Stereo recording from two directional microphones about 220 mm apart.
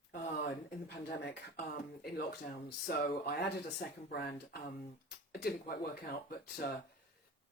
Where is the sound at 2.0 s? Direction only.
45° left (ahead or behind).